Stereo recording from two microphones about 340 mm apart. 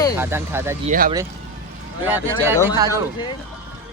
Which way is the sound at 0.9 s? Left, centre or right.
Right.